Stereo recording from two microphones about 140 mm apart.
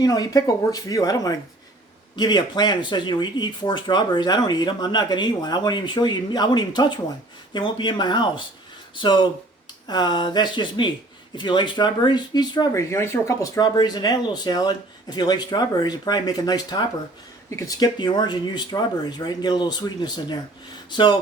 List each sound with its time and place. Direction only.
0.0 s speech: 30° left (ahead or behind)
20.9 s speech: 35° left (ahead or behind)